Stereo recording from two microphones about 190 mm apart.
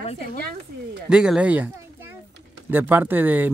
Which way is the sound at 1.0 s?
5° right (ahead or behind).